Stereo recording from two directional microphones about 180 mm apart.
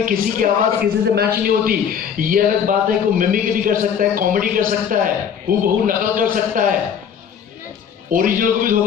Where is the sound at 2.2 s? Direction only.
50° right (ahead or behind).